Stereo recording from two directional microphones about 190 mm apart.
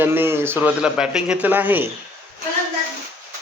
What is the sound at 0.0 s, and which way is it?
Speech, 10° right (ahead or behind).